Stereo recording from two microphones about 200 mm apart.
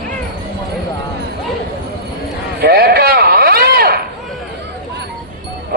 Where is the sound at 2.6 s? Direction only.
50° right (ahead or behind).